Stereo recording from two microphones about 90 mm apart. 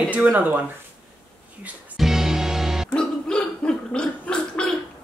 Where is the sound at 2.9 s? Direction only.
10° left (ahead or behind).